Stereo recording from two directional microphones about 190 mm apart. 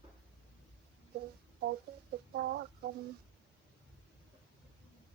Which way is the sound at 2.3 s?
60° right (ahead or behind).